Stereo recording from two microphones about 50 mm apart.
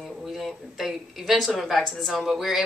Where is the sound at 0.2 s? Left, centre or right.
Centre.